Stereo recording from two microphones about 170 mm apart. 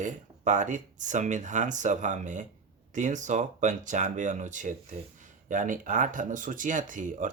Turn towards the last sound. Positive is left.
turn(degrees=-50)  # may be behind; listen again after turning